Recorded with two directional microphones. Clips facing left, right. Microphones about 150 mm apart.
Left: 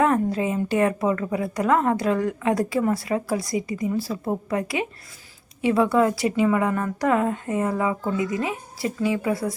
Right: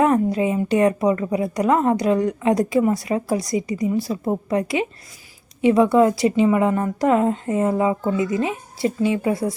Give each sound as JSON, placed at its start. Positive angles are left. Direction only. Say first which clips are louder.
{"t": 0.0, "sound": "a woman's voice", "louder": "right 3 dB", "side_deg": -20}